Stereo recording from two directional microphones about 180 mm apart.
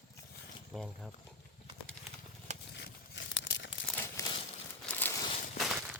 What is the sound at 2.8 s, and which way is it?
Tearing, 75° left (ahead or behind).